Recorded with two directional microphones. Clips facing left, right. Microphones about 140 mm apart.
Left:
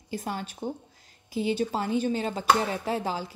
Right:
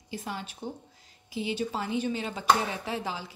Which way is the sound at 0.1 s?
45° left (ahead or behind).